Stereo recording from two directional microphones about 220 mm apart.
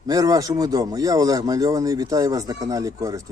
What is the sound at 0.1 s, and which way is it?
Speech, 15° right (ahead or behind).